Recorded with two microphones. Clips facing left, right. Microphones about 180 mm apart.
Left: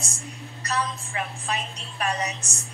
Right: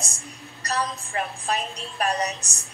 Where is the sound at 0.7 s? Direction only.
40° right (ahead or behind).